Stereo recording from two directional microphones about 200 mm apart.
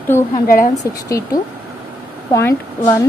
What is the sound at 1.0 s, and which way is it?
A woman's voice, 15° left (ahead or behind).